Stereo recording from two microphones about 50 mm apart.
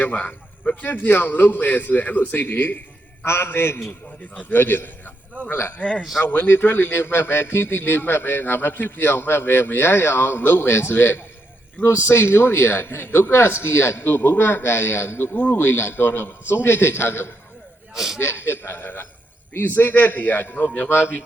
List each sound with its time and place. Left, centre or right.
0.0 s speech: left
0.9 s a man's voice: left
3.2 s a man's voice: left
4.4 s a man's voice: left
6.0 s a man's voice: centre
6.2 s a man's voice: left
17.9 s speech: centre
18.2 s a man's voice: left
20.4 s a man's voice: left